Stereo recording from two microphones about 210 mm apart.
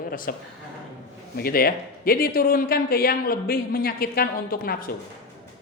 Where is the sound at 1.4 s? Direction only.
45° left (ahead or behind).